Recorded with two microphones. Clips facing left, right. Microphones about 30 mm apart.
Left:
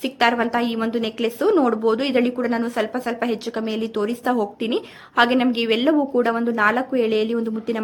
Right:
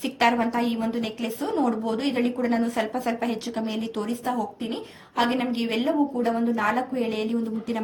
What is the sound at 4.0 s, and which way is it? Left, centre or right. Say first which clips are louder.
Speech: left 7 dB; left.